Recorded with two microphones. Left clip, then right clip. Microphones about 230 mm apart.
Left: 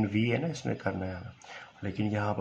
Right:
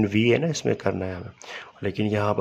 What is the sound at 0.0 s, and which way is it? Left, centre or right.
Speech, right.